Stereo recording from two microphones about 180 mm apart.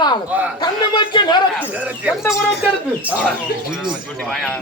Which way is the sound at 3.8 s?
Centre (ahead or behind).